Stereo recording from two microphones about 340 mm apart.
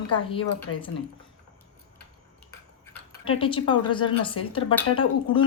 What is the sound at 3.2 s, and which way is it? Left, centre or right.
A woman's voice, centre.